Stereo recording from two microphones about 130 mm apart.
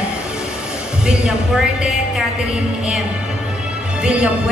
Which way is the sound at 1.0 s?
5° right (ahead or behind).